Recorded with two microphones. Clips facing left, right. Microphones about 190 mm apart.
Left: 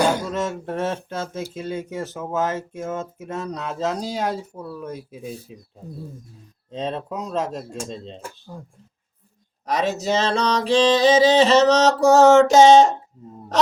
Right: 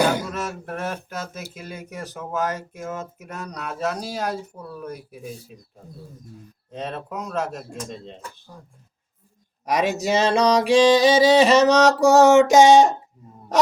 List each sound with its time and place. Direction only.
0.3 s speech: 25° left (ahead or behind)
6.7 s speech: 20° left (ahead or behind)
9.6 s music: 10° right (ahead or behind)